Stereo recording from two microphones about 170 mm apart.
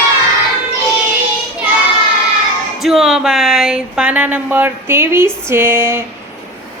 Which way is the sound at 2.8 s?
Centre (ahead or behind).